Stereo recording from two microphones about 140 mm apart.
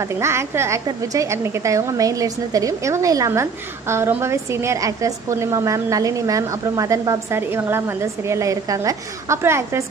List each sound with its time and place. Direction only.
0.0 s a woman's voice: 20° right (ahead or behind)